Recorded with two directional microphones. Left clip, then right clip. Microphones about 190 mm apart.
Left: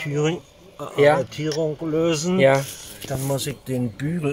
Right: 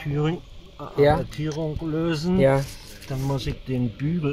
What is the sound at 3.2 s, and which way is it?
Speech, 15° left (ahead or behind).